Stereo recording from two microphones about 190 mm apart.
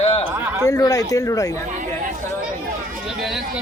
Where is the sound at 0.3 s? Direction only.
15° right (ahead or behind).